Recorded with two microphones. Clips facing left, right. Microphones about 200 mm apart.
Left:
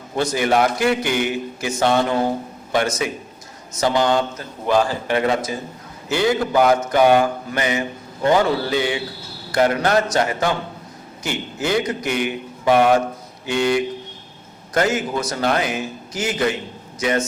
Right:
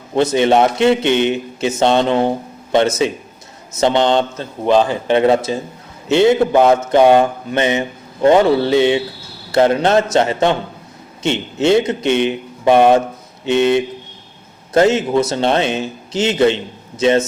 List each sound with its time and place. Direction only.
0.2 s a man's voice: 25° right (ahead or behind)